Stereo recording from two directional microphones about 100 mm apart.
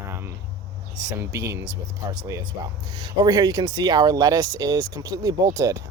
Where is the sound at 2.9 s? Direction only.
45° right (ahead or behind).